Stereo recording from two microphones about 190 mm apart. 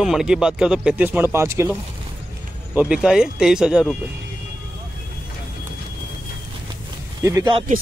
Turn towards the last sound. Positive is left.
turn(degrees=-15)  # may be behind; listen again after turning